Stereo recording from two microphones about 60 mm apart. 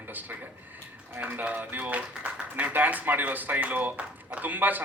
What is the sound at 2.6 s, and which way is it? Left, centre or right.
Speech, right.